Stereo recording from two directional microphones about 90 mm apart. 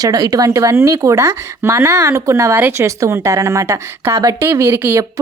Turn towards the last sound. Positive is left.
turn(degrees=-25)  # may be behind; listen again after turning